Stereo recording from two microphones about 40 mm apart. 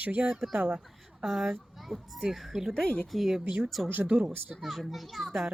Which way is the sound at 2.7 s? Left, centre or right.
Left.